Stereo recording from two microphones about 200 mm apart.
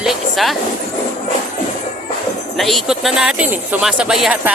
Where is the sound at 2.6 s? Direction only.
Centre (ahead or behind).